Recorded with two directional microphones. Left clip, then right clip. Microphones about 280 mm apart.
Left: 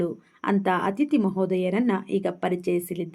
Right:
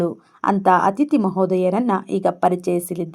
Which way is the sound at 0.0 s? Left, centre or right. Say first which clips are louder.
Right 7 dB; centre.